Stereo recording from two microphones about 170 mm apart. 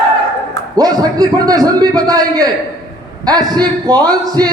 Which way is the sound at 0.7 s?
20° right (ahead or behind).